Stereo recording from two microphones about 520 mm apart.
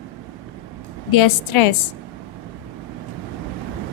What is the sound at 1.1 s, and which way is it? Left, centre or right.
Speech, left.